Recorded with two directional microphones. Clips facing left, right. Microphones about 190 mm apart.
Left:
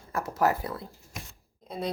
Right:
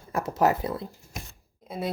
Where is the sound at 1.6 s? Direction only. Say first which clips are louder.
Right 1 dB; 5° right (ahead or behind).